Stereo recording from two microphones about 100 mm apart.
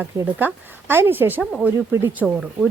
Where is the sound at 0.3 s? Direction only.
20° right (ahead or behind).